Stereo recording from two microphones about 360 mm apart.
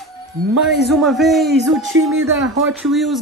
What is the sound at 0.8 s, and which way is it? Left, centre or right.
Speech, centre.